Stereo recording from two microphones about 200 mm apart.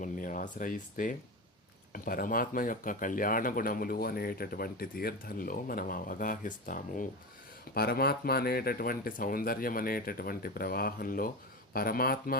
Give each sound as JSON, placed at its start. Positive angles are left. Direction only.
{"t": 0.0, "sound": "speech", "side_deg": 40}